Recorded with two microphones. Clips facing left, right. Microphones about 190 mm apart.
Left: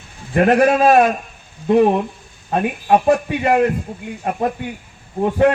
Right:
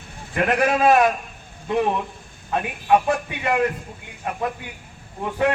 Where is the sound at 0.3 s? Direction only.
40° left (ahead or behind).